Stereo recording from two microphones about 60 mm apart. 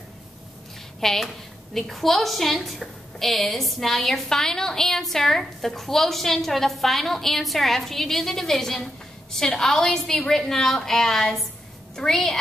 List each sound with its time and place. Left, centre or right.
1.0 s a woman's voice: centre